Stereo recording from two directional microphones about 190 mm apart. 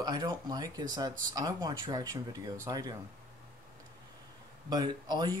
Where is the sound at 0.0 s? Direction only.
20° right (ahead or behind).